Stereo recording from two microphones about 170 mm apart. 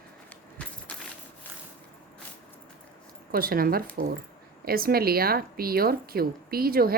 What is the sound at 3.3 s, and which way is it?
A woman's voice, 60° right (ahead or behind).